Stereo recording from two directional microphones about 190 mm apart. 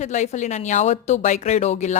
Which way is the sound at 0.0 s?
40° left (ahead or behind).